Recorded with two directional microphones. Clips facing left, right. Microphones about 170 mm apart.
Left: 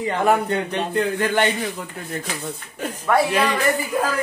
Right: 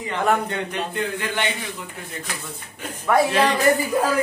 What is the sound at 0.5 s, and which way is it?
A man's voice, 35° left (ahead or behind).